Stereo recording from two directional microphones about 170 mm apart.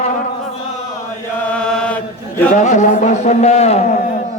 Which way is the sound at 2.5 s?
45° left (ahead or behind).